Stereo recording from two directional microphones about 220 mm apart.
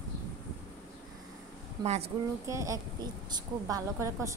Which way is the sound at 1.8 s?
30° right (ahead or behind).